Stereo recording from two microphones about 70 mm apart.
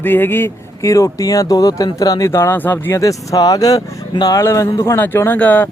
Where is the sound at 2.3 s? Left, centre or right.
Left.